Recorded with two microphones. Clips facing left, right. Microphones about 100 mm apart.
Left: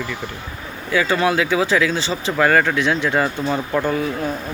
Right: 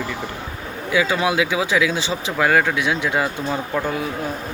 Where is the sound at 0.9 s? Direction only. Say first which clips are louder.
Left 1 dB; 10° right (ahead or behind).